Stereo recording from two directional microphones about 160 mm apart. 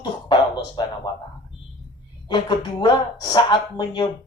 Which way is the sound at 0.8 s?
25° left (ahead or behind).